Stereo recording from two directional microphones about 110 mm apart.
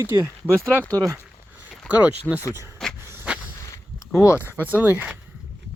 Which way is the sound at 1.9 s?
15° right (ahead or behind).